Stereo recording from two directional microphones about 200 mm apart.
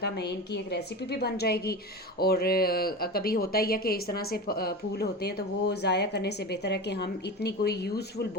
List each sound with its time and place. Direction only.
0.0 s a woman's voice: 55° left (ahead or behind)